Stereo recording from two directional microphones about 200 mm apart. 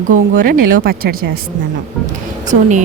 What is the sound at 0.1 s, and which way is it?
Speech, 45° right (ahead or behind).